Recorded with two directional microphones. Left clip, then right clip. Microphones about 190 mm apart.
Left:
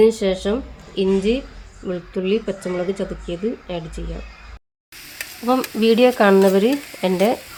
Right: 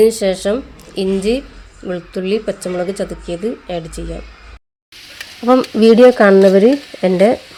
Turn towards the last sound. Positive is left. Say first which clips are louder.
# right 6 dB
turn(degrees=-20)  # may be behind; listen again after turning